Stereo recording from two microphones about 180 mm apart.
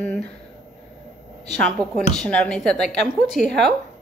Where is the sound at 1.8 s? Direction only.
25° right (ahead or behind).